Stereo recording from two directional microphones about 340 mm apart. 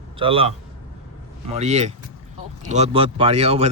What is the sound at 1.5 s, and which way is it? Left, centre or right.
A man's voice, centre.